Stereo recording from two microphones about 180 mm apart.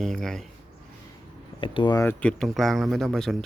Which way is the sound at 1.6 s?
30° left (ahead or behind).